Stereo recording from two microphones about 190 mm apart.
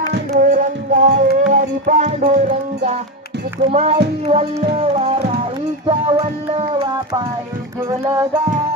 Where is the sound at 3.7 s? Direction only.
35° right (ahead or behind).